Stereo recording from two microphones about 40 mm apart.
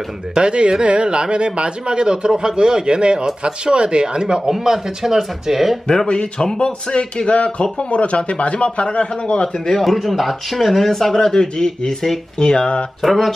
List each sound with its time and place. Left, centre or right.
0.3 s a man's voice: right; by 5.8 s centre
6.0 s speech: left
9.7 s speech: centre; by 12.8 s left
13.0 s speech: centre